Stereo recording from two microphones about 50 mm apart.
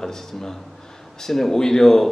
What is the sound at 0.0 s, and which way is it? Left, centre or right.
Speech, centre.